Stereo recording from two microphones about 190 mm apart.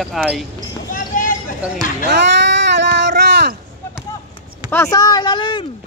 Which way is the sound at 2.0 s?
60° right (ahead or behind).